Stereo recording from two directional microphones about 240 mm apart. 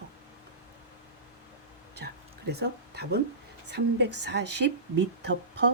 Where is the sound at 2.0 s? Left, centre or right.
Right.